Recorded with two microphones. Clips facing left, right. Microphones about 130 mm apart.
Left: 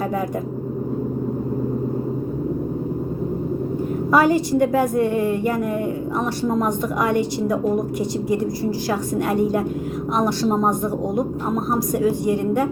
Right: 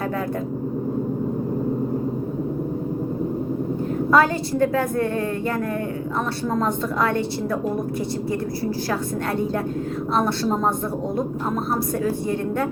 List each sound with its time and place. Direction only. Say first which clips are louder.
4.1 s a woman's voice: left 3 dB; 15° left (ahead or behind)
8.9 s a woman's voice: left 3 dB; 15° left (ahead or behind)